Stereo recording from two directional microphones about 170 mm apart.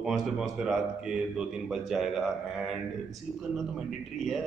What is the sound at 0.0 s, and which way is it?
Speech, centre (ahead or behind).